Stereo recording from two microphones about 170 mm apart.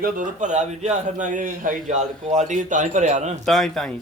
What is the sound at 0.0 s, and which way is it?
A man's voice, 50° right (ahead or behind).